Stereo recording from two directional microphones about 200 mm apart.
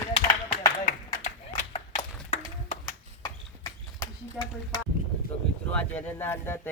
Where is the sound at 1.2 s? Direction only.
35° left (ahead or behind).